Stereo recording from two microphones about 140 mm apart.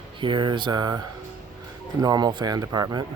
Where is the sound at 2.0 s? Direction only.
30° right (ahead or behind).